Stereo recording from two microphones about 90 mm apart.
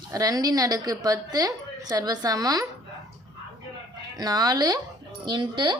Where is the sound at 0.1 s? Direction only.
40° right (ahead or behind).